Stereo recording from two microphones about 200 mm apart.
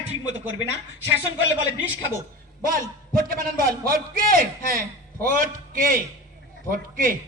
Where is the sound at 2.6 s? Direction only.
45° right (ahead or behind).